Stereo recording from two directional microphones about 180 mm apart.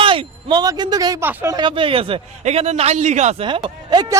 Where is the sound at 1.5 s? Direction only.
25° right (ahead or behind).